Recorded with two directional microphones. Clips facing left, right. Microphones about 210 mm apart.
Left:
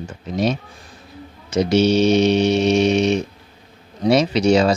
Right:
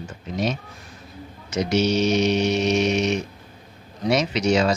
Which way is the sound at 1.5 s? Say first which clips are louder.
Left 5 dB; 30° left (ahead or behind).